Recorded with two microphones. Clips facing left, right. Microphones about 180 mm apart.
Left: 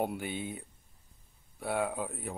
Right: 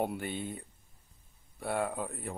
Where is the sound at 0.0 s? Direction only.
Centre (ahead or behind).